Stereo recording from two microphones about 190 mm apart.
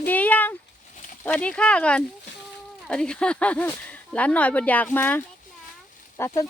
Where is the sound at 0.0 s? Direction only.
10° left (ahead or behind).